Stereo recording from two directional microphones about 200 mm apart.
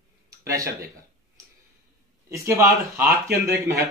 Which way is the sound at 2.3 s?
15° right (ahead or behind).